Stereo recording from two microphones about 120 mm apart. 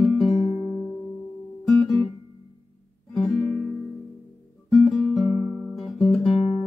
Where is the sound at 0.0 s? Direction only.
5° left (ahead or behind).